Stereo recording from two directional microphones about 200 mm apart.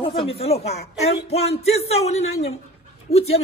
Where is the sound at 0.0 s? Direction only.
25° left (ahead or behind).